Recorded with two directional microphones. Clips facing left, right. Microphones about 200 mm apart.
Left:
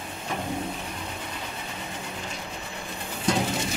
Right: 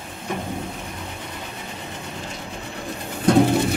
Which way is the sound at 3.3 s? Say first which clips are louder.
Right 10 dB; 60° right (ahead or behind).